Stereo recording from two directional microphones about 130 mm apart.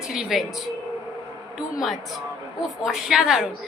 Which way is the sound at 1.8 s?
Centre (ahead or behind).